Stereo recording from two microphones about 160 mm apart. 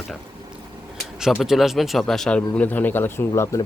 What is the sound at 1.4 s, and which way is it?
Speech, centre (ahead or behind).